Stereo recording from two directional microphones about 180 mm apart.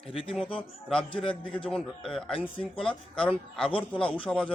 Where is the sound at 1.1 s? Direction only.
30° left (ahead or behind).